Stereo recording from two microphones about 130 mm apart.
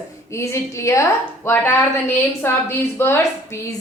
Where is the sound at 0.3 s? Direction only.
20° left (ahead or behind).